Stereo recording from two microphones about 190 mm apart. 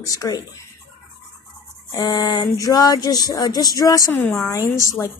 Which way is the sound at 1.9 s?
20° left (ahead or behind).